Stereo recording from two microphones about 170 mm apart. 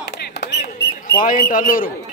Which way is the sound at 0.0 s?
75° left (ahead or behind).